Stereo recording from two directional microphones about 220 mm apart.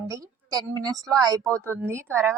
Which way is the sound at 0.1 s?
15° right (ahead or behind).